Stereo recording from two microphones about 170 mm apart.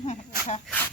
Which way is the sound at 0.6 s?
10° left (ahead or behind).